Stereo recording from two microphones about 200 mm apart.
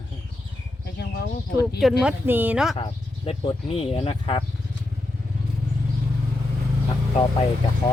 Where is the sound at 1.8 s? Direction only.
Centre (ahead or behind).